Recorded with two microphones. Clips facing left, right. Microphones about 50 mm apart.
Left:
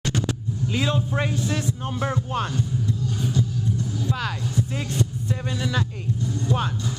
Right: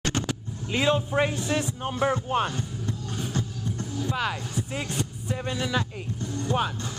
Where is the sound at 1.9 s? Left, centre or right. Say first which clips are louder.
Right 5 dB; centre.